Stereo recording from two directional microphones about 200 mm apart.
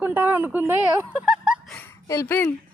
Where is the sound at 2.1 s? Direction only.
15° left (ahead or behind).